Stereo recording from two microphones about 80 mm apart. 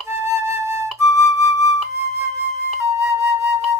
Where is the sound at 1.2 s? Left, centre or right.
Left.